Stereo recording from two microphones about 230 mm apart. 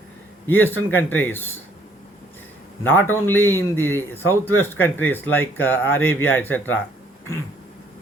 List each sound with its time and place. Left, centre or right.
0.4 s a man's voice: centre
2.8 s a man's voice: centre